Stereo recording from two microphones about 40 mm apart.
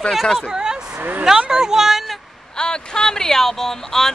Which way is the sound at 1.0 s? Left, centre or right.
Right.